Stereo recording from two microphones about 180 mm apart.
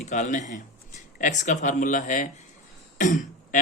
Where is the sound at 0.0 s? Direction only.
40° left (ahead or behind).